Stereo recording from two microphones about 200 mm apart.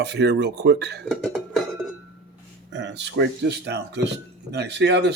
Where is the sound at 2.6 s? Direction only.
60° right (ahead or behind).